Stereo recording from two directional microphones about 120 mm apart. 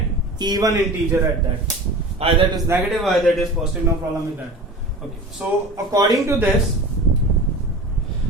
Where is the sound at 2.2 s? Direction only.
55° right (ahead or behind).